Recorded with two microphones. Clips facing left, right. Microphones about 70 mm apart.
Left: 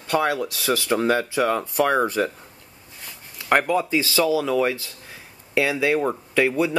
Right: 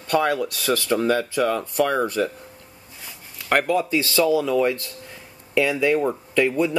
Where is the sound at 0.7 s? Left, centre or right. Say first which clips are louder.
Even; centre.